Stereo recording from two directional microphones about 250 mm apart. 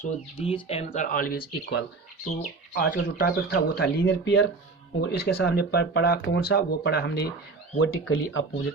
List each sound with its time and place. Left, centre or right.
0.0 s speech: left